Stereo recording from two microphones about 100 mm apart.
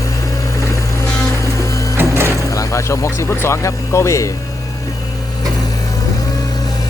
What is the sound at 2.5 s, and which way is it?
Speech, 30° left (ahead or behind).